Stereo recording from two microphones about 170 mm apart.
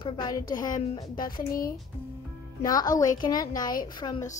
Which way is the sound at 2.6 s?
20° left (ahead or behind).